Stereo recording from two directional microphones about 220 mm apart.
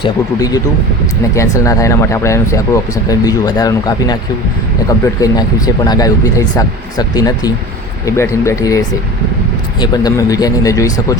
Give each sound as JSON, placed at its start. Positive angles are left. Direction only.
{"t": 0.0, "sound": "speech", "side_deg": 15}
{"t": 9.8, "sound": "speech", "side_deg": 15}